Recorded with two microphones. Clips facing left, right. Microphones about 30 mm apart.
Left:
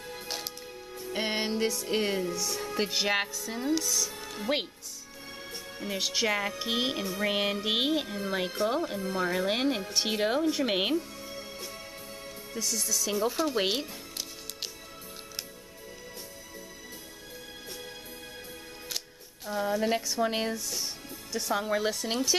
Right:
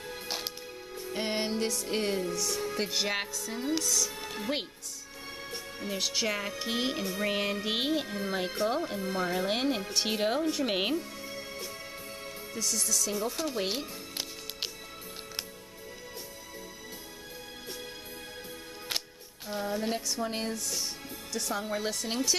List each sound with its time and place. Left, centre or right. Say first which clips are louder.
0.0 s music: right 1 dB; centre
1.1 s music: left 1 dB; centre
1.5 s music: left 2 dB; centre
3.8 s speech: right 1 dB; centre
4.2 s music: right 1 dB; centre
5.9 s music: left 2 dB; centre
7.5 s speech: left 2 dB; centre
11.0 s music: left 1 dB; centre
12.5 s speech: even; centre
13.0 s speech: left 7 dB; left
19.5 s speech: left 3 dB; centre
20.2 s speech: left 5 dB; left
20.4 s music: left 1 dB; centre